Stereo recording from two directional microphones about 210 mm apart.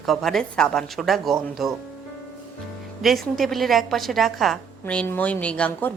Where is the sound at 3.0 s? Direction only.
Centre (ahead or behind).